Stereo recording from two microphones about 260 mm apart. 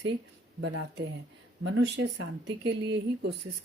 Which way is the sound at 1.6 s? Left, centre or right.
Right.